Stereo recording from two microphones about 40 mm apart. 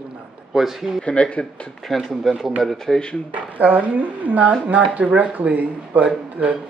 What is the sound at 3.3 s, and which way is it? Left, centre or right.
Speech, right.